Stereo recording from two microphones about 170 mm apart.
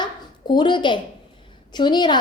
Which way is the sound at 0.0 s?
25° left (ahead or behind).